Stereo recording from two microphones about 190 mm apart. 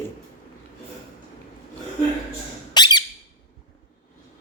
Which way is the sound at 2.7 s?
20° left (ahead or behind).